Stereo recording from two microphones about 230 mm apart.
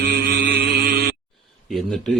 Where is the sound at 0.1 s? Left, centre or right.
Right.